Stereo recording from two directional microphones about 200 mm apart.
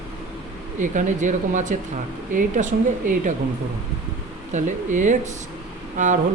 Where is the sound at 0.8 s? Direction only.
40° right (ahead or behind).